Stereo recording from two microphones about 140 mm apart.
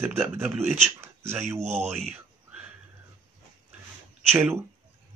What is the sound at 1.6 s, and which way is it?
Speech, 50° right (ahead or behind).